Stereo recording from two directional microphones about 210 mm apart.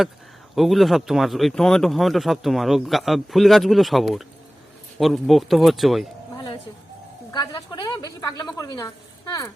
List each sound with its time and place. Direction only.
0.5 s speech: centre (ahead or behind)
7.3 s a woman's voice: 20° left (ahead or behind)